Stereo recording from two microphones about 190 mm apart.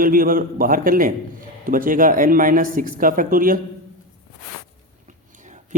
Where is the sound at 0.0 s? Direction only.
50° right (ahead or behind).